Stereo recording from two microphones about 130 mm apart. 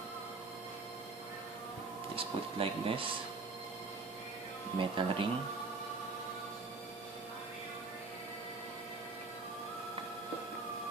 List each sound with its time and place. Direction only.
2.1 s speech: 45° right (ahead or behind)
4.8 s speech: 40° right (ahead or behind)